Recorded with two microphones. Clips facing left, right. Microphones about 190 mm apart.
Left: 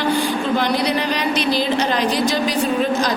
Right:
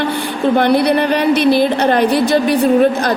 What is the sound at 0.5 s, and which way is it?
A woman's voice, 60° right (ahead or behind).